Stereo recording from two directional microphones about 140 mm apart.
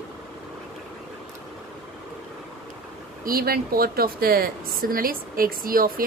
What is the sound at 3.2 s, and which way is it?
A woman's voice, 90° right.